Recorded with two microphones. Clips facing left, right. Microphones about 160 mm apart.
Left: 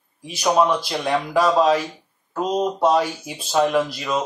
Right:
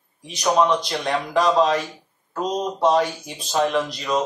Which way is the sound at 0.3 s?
5° left (ahead or behind).